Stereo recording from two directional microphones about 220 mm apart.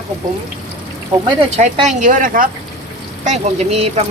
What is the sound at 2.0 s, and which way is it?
Speech, 35° right (ahead or behind).